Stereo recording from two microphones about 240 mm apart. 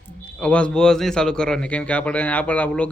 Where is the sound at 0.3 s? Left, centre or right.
Centre.